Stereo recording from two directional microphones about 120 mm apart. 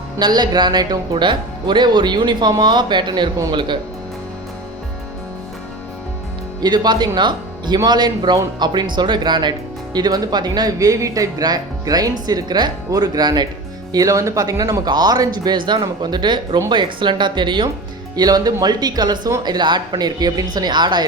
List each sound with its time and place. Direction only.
0.2 s speech: 35° right (ahead or behind)
6.6 s speech: 35° right (ahead or behind)